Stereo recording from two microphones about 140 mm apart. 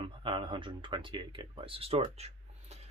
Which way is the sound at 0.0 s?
40° right (ahead or behind).